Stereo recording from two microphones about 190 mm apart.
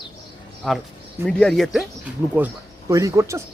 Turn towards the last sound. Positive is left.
turn(degrees=-15)  # may be behind; listen again after turning